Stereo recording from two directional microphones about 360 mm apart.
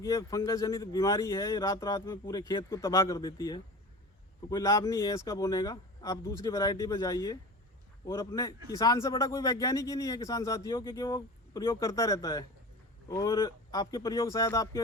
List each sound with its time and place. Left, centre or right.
0.0 s speech: centre